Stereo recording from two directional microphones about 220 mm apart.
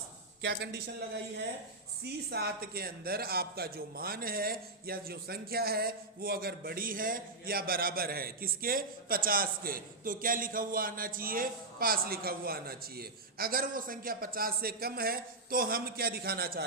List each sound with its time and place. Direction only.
0.4 s a man's voice: 50° right (ahead or behind)